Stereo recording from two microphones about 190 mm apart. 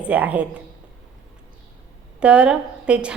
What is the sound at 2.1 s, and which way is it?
A woman's voice, 5° right (ahead or behind).